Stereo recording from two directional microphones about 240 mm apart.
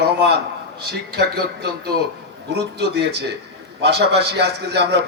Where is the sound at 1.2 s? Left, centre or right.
Right.